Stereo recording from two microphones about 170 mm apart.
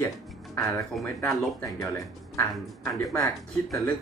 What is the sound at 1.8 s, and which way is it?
Speech, 20° left (ahead or behind).